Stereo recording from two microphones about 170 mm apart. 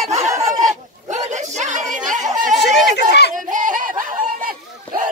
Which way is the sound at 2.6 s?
80° left.